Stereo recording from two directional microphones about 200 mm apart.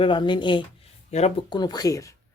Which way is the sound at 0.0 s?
25° left (ahead or behind).